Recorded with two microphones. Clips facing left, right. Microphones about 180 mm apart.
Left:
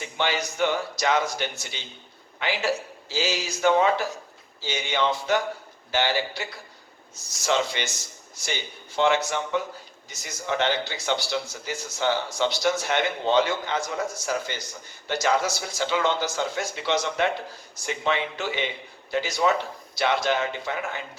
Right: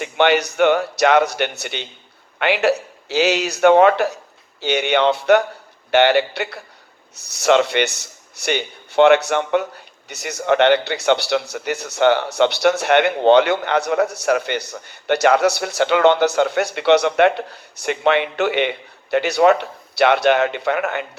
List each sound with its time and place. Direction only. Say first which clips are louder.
0.0 s a man's voice: right 11 dB; 65° right (ahead or behind)